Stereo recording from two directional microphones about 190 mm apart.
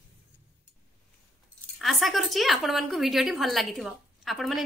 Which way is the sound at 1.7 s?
Centre (ahead or behind).